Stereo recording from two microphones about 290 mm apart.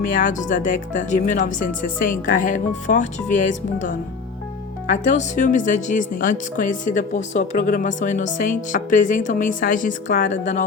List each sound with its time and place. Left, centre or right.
0.1 s speech: left